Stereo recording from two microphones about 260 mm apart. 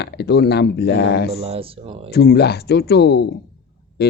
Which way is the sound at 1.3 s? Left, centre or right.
Right.